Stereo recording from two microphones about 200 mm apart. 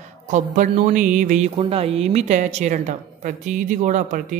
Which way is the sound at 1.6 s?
30° right (ahead or behind).